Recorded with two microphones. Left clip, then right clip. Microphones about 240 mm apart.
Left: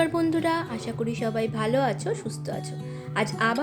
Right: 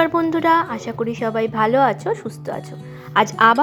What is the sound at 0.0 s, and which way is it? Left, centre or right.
A woman's voice, centre.